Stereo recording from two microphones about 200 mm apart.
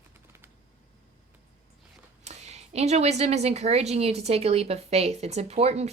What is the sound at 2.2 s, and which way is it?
A woman's voice, 35° right (ahead or behind).